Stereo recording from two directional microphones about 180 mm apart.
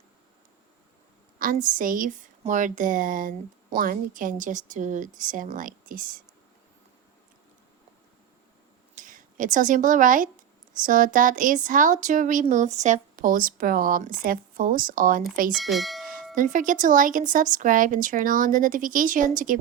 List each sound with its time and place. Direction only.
1.6 s speech: 50° right (ahead or behind)
9.0 s speech: 45° right (ahead or behind)
15.5 s speech: centre (ahead or behind)
16.3 s speech: 45° right (ahead or behind)